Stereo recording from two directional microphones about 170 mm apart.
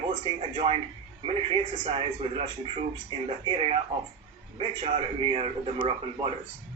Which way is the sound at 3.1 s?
30° right (ahead or behind).